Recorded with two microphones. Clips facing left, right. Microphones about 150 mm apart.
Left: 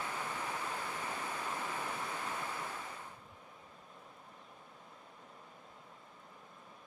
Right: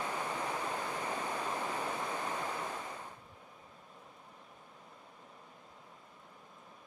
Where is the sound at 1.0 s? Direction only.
20° right (ahead or behind).